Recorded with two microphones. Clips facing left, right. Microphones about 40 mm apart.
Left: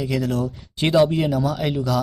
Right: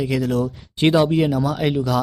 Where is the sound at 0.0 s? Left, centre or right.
Centre.